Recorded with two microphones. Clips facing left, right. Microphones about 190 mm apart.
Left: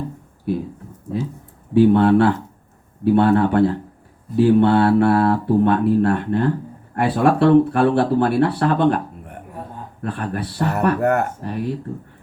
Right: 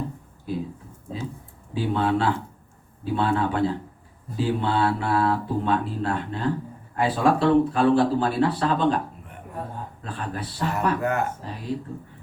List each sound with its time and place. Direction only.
1.7 s speech: 60° left (ahead or behind)
10.0 s speech: 60° left (ahead or behind)